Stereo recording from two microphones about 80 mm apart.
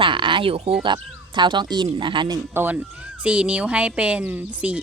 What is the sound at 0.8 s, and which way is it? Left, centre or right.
Speech, right.